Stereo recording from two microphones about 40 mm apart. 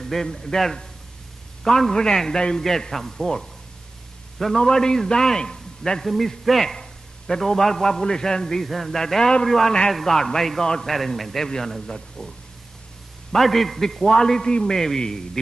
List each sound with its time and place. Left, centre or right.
0.0 s a man's voice: centre
4.6 s a man's voice: centre
6.0 s a man's voice: centre
8.6 s a man's voice: centre
13.3 s a man's voice: centre